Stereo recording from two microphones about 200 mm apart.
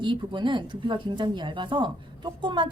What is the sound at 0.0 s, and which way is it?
Speech, 25° right (ahead or behind).